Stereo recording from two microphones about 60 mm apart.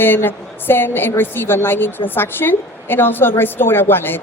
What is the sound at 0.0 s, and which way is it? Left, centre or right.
A woman's voice, left.